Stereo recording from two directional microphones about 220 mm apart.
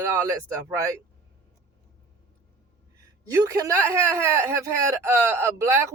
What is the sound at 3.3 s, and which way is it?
Speech, 15° right (ahead or behind).